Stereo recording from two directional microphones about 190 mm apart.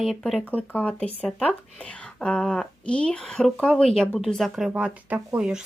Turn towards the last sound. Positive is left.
turn(degrees=-5)  # may be behind; listen again after turning